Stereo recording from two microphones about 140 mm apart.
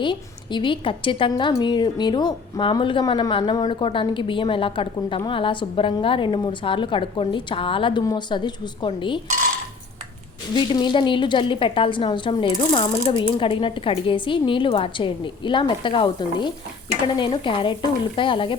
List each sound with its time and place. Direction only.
0.0 s a woman's voice: 35° left (ahead or behind)
10.5 s a woman's voice: 35° left (ahead or behind)